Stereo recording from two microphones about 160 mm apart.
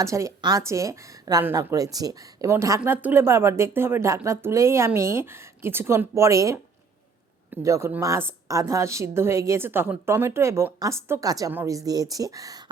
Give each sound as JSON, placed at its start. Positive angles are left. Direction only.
{"t": 0.0, "sound": "speech", "side_deg": -20}